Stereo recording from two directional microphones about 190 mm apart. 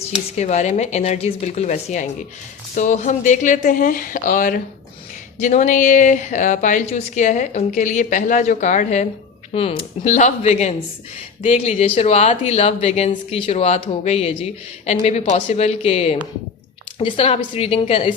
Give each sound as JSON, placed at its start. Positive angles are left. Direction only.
{"t": 0.3, "sound": "a woman's voice", "side_deg": 35}